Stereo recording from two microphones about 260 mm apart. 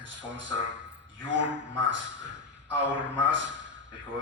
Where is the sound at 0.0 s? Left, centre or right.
Right.